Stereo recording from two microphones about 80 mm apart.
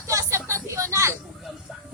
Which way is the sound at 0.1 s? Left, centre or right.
Right.